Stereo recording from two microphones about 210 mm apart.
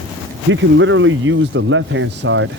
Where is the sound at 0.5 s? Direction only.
65° right (ahead or behind).